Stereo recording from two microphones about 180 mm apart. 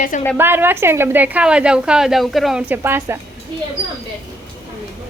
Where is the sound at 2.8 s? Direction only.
15° right (ahead or behind).